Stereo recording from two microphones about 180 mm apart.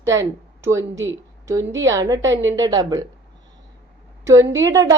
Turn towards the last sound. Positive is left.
turn(degrees=-20)  # may be behind; listen again after turning